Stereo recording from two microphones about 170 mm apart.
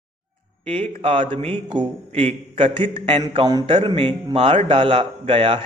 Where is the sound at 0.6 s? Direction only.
35° right (ahead or behind).